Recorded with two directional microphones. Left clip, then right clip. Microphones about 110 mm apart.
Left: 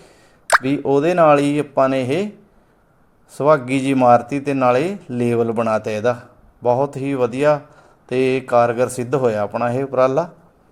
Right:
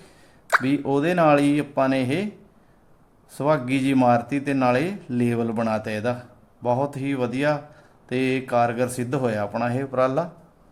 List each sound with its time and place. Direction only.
0.6 s a man's voice: 30° left (ahead or behind)
3.3 s a man's voice: 30° left (ahead or behind)